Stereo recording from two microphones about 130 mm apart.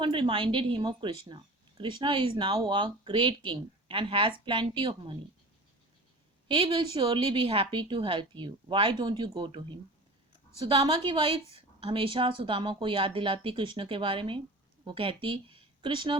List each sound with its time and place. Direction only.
0.0 s a woman's voice: 40° right (ahead or behind)
6.5 s a woman's voice: 40° right (ahead or behind)
10.7 s a woman's voice: 50° right (ahead or behind)